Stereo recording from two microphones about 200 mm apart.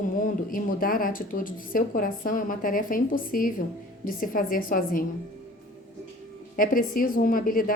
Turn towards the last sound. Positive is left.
turn(degrees=45)  # may be behind; listen again after turning